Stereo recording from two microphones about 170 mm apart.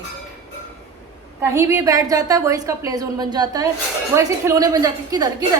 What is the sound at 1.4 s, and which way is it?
A woman's voice, 15° right (ahead or behind).